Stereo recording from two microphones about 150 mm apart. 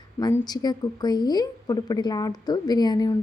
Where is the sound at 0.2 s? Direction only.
25° left (ahead or behind).